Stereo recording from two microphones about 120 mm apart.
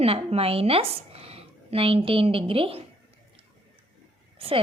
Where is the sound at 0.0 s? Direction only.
55° right (ahead or behind).